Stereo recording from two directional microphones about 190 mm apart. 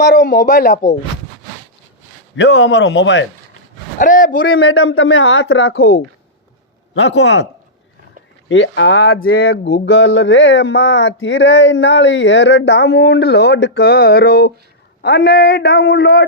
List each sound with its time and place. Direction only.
0.2 s speech: 45° left (ahead or behind)
2.3 s speech: 70° left (ahead or behind)
3.9 s speech: 45° left (ahead or behind)
4.6 s a woman's voice: 90° left
6.9 s a man's voice: 65° left (ahead or behind)
8.4 s a man's voice: 75° left (ahead or behind); by 16.2 s 55° left (ahead or behind)